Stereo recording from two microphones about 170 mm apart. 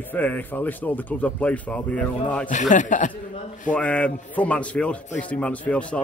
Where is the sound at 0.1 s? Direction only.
10° left (ahead or behind).